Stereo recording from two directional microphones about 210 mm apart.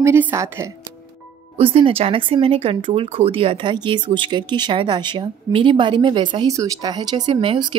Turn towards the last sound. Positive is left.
turn(degrees=-25)  # may be behind; listen again after turning